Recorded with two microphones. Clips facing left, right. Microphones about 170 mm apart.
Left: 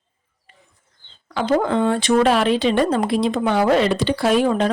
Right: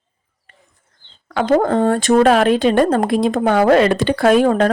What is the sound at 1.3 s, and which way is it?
Speech, 60° right (ahead or behind).